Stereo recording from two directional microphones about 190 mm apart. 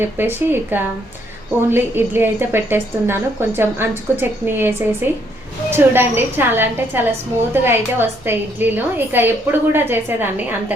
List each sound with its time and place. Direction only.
0.0 s a woman's voice: 10° right (ahead or behind)